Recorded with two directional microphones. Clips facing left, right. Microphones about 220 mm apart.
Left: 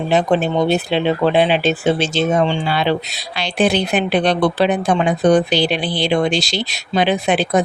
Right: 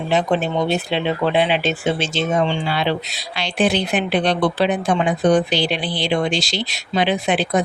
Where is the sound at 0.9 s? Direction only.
35° left (ahead or behind).